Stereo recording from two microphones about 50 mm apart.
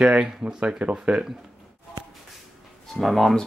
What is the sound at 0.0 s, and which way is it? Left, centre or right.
Speech, right.